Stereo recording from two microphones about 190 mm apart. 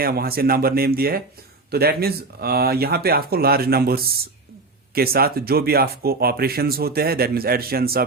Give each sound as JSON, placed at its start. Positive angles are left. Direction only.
{"t": 0.0, "sound": "speech", "side_deg": -50}